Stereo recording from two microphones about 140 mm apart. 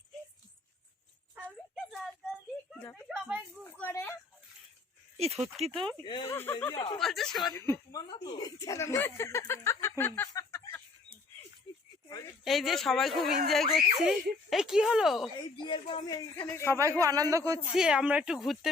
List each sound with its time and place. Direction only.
1.5 s a sound: centre (ahead or behind)
3.1 s a sound: 10° right (ahead or behind)
3.6 s a sound: 15° left (ahead or behind)
5.1 s speech: 50° right (ahead or behind)
6.2 s speech: 15° left (ahead or behind)
6.7 s speech: 35° left (ahead or behind)
7.0 s speech: centre (ahead or behind)
7.5 s speech: 20° left (ahead or behind)
10.0 s a sound: 20° left (ahead or behind)
12.5 s speech: centre (ahead or behind)
15.6 s speech: 35° left (ahead or behind)
16.3 s speech: 15° left (ahead or behind)
17.0 s a man's voice: 25° right (ahead or behind)
17.7 s speech: 5° right (ahead or behind)